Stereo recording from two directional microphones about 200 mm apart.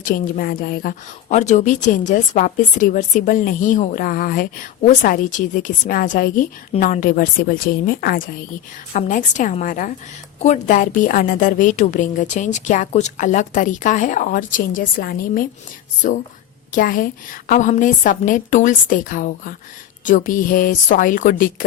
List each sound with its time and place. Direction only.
0.0 s a woman's voice: 45° left (ahead or behind)